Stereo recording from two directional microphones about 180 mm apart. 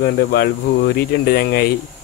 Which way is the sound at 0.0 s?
60° left (ahead or behind).